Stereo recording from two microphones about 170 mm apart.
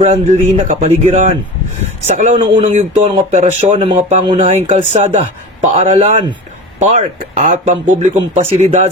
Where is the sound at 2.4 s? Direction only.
30° right (ahead or behind).